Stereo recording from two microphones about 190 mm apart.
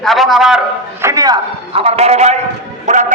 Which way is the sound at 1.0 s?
15° right (ahead or behind).